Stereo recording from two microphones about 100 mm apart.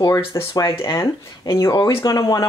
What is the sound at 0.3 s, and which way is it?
Speech, 30° left (ahead or behind).